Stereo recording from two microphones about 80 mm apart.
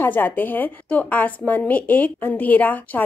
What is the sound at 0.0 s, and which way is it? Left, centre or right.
A woman's voice, left.